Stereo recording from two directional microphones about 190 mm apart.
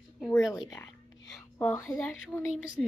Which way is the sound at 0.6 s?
15° left (ahead or behind).